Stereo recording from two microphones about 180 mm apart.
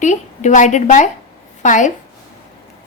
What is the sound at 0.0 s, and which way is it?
A woman's voice, 45° left (ahead or behind).